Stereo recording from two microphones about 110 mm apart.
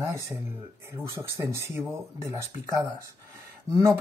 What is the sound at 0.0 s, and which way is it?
Speech, 25° right (ahead or behind).